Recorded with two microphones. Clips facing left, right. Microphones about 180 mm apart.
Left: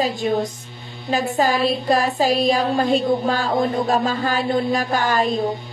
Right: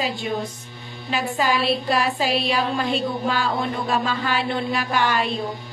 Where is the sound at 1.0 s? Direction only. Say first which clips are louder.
Left 4 dB; 40° left (ahead or behind).